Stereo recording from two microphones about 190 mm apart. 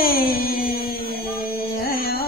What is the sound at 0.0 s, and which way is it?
Music, 50° left (ahead or behind).